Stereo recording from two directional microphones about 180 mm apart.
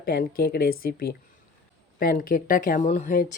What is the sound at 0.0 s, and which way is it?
Speech, 55° left (ahead or behind).